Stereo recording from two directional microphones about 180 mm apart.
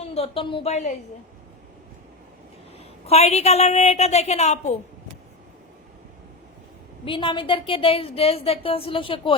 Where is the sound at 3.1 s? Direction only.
35° left (ahead or behind).